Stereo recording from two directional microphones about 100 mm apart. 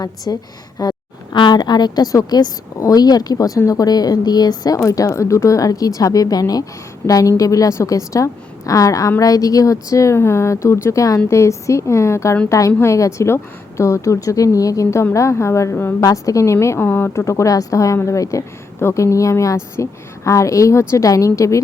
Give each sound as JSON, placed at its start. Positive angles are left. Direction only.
{"t": 0.3, "sound": "a woman's voice", "side_deg": 35}
{"t": 16.0, "sound": "a woman's voice", "side_deg": 35}